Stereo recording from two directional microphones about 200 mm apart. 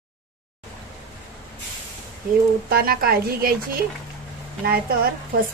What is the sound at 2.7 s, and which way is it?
Speech, 50° right (ahead or behind).